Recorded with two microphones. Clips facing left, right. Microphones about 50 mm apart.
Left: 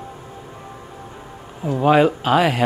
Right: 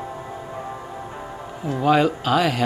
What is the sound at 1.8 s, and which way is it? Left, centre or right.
Speech, centre.